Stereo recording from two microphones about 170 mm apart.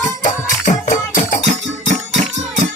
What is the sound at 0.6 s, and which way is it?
Music, 50° left (ahead or behind).